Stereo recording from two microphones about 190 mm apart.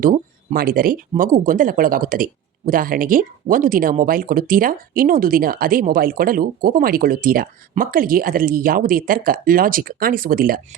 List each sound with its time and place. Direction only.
0.0 s speech: 50° right (ahead or behind)